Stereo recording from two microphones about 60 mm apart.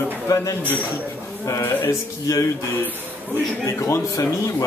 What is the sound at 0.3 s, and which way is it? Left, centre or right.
Speech, left.